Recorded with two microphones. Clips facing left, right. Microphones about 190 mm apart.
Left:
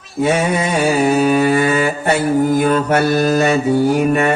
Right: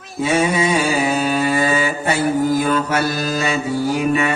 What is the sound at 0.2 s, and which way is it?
Mantra, 55° left (ahead or behind).